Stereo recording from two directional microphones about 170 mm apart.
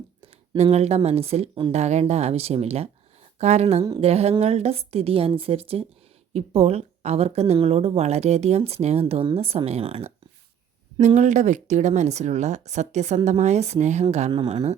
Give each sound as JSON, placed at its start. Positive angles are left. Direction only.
{"t": 0.2, "sound": "a woman's voice", "side_deg": -40}